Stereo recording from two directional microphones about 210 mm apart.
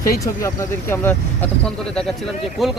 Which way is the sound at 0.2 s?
15° left (ahead or behind).